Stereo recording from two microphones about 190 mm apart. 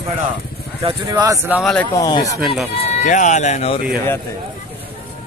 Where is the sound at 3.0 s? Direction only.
40° left (ahead or behind).